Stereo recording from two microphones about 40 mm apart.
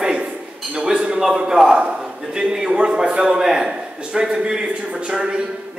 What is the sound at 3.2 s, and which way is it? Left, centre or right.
A man's voice, centre.